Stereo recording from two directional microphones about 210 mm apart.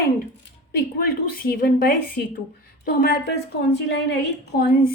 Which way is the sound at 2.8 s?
45° left (ahead or behind).